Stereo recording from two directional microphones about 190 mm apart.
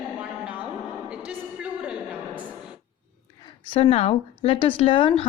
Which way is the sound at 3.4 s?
30° left (ahead or behind).